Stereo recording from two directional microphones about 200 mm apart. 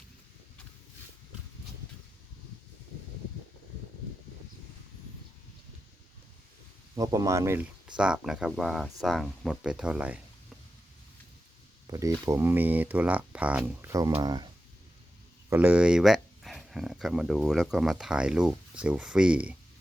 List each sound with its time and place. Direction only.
6.9 s speech: 20° right (ahead or behind)
11.9 s speech: 15° right (ahead or behind)
15.4 s speech: 10° right (ahead or behind)